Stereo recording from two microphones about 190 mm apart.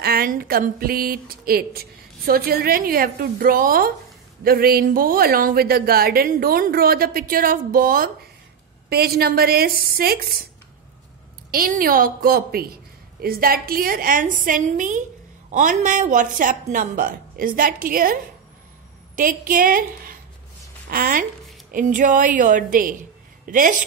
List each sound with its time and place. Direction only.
0.0 s a woman's voice: 55° right (ahead or behind)
11.5 s a woman's voice: 50° right (ahead or behind)